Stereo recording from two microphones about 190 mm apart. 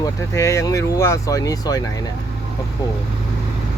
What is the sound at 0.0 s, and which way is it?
Speech, 15° left (ahead or behind).